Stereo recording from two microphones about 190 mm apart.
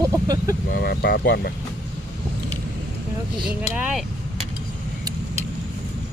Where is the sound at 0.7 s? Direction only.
55° left (ahead or behind).